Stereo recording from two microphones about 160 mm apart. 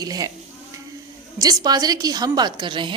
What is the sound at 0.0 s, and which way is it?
Speech, 25° right (ahead or behind).